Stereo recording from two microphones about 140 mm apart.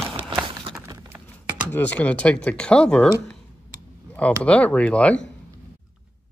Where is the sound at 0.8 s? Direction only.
20° right (ahead or behind).